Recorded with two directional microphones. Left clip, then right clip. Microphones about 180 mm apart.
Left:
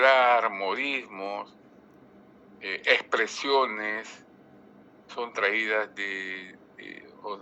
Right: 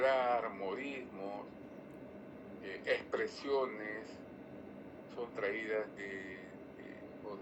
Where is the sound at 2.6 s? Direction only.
50° left (ahead or behind).